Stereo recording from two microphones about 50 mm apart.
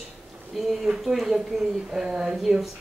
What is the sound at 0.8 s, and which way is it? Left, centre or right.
A woman's voice, centre.